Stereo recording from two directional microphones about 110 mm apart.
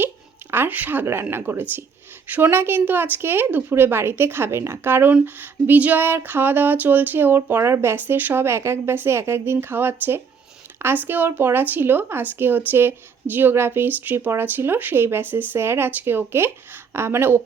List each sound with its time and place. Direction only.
0.5 s speech: 15° right (ahead or behind)